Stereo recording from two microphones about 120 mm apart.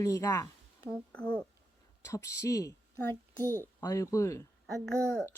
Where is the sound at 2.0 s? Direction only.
25° left (ahead or behind).